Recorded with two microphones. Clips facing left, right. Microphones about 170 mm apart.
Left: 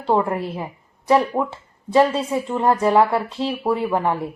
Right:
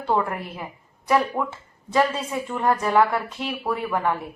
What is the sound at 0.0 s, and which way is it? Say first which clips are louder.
A woman's voice: left 4 dB; 25° left (ahead or behind).